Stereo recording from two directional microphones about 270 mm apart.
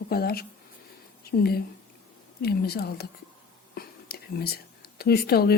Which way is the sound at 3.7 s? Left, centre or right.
Left.